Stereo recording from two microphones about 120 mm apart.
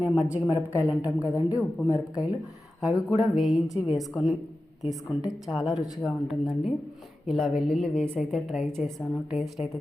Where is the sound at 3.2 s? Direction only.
Centre (ahead or behind).